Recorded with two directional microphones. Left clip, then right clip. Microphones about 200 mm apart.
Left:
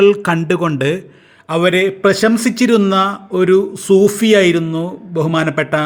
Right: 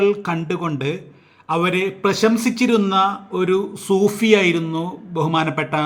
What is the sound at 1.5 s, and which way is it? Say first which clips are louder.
A man's voice: left 6 dB; 20° left (ahead or behind).